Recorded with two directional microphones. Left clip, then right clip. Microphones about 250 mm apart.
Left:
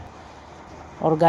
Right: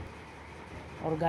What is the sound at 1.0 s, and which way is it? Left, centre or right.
Speech, left.